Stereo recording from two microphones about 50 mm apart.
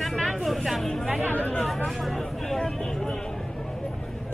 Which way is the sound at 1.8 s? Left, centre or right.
Centre.